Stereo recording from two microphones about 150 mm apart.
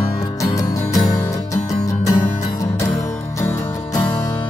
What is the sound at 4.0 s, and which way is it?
Music, 30° left (ahead or behind).